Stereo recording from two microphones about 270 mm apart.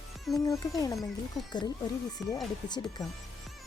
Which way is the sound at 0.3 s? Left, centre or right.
Centre.